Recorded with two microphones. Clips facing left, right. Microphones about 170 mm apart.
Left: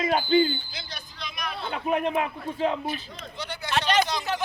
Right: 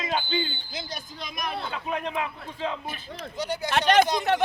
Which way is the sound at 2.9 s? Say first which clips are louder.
Left 2 dB; 45° right (ahead or behind).